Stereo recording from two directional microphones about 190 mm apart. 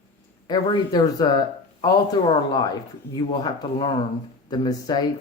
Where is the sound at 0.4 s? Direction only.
20° left (ahead or behind).